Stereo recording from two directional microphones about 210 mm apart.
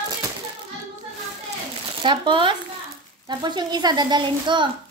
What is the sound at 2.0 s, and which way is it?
Speech, 25° right (ahead or behind).